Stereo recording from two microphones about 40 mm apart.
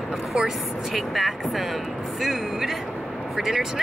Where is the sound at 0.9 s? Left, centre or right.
Centre.